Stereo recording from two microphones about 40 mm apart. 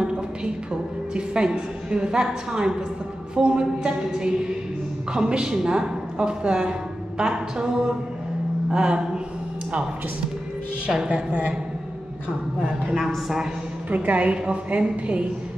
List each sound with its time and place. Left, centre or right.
1.1 s a woman's voice: right
11.1 s speech: right
12.5 s speech: right
13.8 s a woman's voice: right